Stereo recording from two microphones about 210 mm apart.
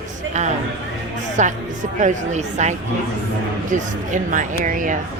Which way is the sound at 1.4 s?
35° right (ahead or behind).